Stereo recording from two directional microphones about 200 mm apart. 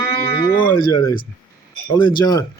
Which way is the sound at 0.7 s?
20° left (ahead or behind).